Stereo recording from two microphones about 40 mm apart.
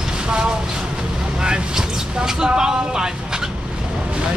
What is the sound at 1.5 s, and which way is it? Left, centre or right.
Vehicle, centre.